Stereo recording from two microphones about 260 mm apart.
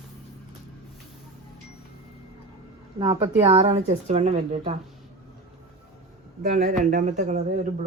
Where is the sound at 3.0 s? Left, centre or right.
Centre.